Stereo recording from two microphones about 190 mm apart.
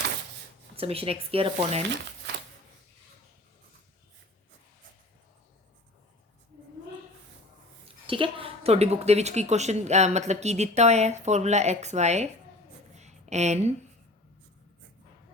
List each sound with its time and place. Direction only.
0.8 s a woman's voice: 30° right (ahead or behind)
8.0 s a woman's voice: 25° right (ahead or behind)
13.0 s a sound: 35° right (ahead or behind)